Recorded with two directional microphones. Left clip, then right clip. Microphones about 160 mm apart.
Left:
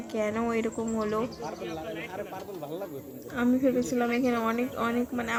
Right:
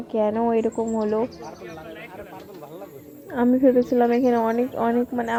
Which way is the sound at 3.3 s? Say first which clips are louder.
Right 7 dB; 35° right (ahead or behind).